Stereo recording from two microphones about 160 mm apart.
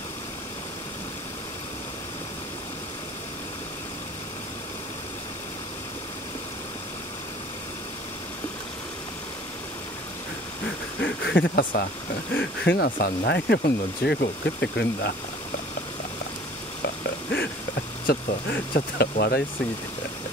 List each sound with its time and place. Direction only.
11.0 s speech: 85° left
12.4 s speech: 90° left
16.8 s a sound: 80° left
18.0 s speech: 75° left (ahead or behind)